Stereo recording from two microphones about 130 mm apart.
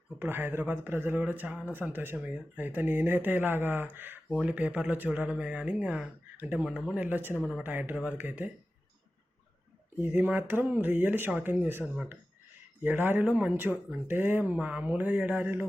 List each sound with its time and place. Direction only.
0.2 s speech: 15° right (ahead or behind)
10.0 s speech: 15° right (ahead or behind)